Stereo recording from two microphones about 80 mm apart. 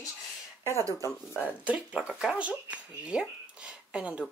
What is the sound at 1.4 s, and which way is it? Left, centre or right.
Speech, centre.